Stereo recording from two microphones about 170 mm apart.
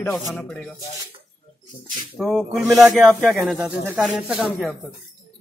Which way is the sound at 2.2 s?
Centre (ahead or behind).